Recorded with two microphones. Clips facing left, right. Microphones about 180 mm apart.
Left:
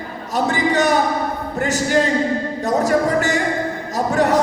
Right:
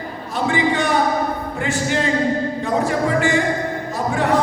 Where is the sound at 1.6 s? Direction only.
45° left (ahead or behind).